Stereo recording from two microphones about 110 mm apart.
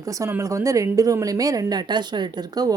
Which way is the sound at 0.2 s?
25° right (ahead or behind).